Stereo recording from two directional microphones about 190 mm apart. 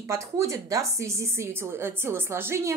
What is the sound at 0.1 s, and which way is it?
A woman's voice, 15° right (ahead or behind).